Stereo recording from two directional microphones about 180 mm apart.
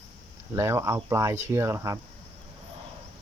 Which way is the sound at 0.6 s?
15° right (ahead or behind).